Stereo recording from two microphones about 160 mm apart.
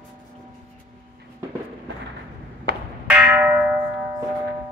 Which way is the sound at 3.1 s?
10° right (ahead or behind).